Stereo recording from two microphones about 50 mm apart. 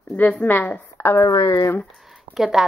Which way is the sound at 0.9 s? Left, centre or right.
Left.